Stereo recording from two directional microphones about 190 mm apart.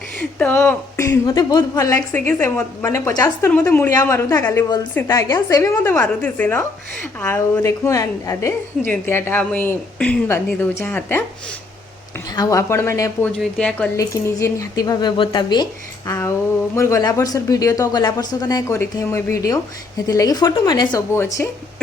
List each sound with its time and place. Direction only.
0.2 s a woman's voice: 5° left (ahead or behind)
12.3 s a woman's voice: 20° left (ahead or behind)
13.9 s a woman's voice: 15° left (ahead or behind)